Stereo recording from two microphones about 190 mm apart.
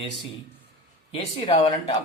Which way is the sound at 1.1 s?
25° left (ahead or behind).